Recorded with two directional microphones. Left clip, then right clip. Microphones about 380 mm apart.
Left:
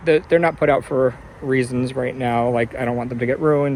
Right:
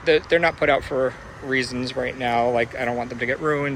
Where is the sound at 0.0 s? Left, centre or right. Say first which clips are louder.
Left 2 dB; centre.